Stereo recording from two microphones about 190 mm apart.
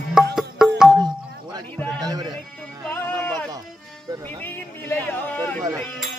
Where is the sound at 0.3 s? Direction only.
5° right (ahead or behind).